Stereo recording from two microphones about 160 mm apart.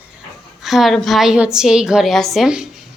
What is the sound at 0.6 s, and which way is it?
Speech, centre (ahead or behind).